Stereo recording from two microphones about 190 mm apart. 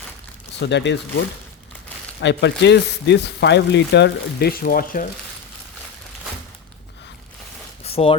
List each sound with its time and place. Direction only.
0.6 s speech: 65° left (ahead or behind)
2.2 s speech: 65° left (ahead or behind); by 5.0 s 50° left (ahead or behind)
7.9 s a sound: 30° left (ahead or behind)